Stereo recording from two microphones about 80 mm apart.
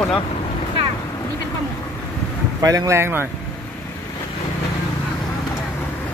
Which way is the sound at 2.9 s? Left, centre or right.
Right.